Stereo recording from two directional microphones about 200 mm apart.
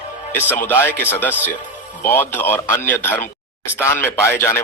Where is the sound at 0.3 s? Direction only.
10° left (ahead or behind).